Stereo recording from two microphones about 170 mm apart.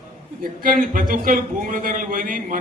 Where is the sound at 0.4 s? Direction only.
55° right (ahead or behind).